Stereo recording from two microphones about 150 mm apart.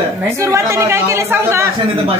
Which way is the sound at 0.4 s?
20° right (ahead or behind).